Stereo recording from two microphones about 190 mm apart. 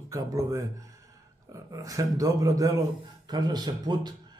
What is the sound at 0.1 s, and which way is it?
A man's voice, 15° right (ahead or behind).